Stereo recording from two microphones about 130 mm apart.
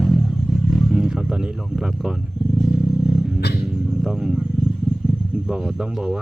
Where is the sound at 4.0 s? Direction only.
5° right (ahead or behind).